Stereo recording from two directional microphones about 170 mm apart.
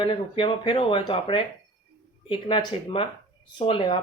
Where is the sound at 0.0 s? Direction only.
30° left (ahead or behind).